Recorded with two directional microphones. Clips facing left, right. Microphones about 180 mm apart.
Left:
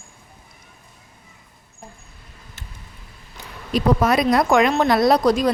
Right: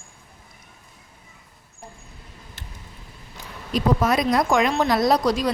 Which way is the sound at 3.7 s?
65° left (ahead or behind).